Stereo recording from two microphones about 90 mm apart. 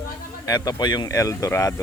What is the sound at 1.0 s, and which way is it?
Speech, 40° left (ahead or behind).